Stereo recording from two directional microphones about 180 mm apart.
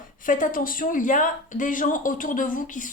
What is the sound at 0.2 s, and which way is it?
Speech, 50° left (ahead or behind).